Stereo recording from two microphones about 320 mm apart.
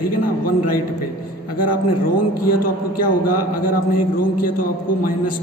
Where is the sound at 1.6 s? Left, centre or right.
Left.